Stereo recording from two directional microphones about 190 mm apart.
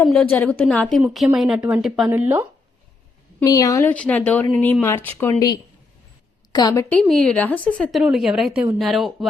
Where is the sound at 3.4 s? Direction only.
20° left (ahead or behind).